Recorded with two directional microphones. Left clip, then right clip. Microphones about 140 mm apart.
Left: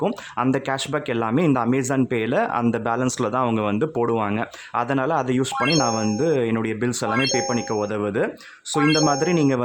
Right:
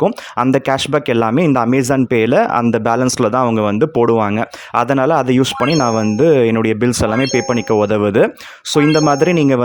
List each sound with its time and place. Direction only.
0.5 s speech: 45° right (ahead or behind)
5.5 s speech: centre (ahead or behind)
6.1 s speech: 45° right (ahead or behind)
7.1 s speech: centre (ahead or behind)
7.5 s speech: 50° right (ahead or behind)
8.8 s speech: centre (ahead or behind)
9.0 s speech: 45° right (ahead or behind)